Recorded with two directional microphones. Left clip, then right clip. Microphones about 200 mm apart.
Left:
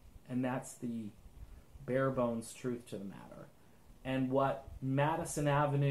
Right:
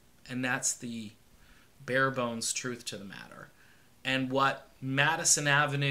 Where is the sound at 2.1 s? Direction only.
15° right (ahead or behind).